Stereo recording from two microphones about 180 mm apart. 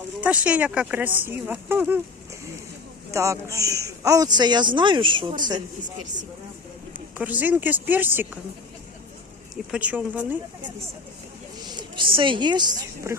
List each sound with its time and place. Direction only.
0.2 s speech: 5° right (ahead or behind)
3.1 s speech: 15° right (ahead or behind)
7.2 s speech: 10° right (ahead or behind)
9.7 s speech: 10° right (ahead or behind)
11.7 s a woman's voice: 25° right (ahead or behind)